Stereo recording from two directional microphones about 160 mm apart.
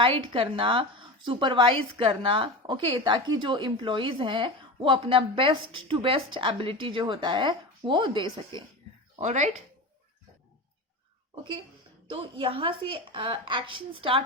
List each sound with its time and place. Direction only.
0.0 s a woman's voice: 35° right (ahead or behind)
9.2 s speech: 50° right (ahead or behind)
12.1 s a woman's voice: 35° right (ahead or behind)